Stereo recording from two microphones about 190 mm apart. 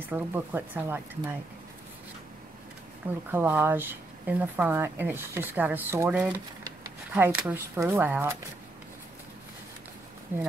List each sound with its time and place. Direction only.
0.1 s speech: 10° right (ahead or behind)
3.3 s speech: 10° right (ahead or behind)